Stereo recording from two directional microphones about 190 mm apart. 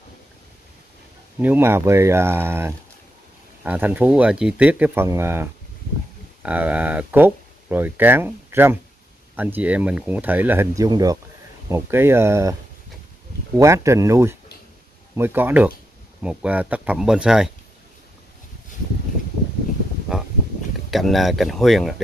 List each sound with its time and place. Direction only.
1.4 s speech: 10° right (ahead or behind)
13.6 s speech: 15° right (ahead or behind)
20.9 s speech: centre (ahead or behind)